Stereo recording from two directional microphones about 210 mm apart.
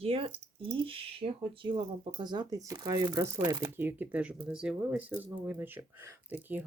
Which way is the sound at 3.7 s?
10° right (ahead or behind).